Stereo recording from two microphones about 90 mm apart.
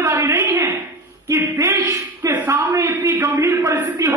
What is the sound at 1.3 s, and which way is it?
A man's voice, 30° right (ahead or behind).